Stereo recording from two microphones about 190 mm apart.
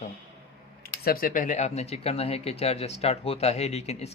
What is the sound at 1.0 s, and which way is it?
Speech, 50° left (ahead or behind).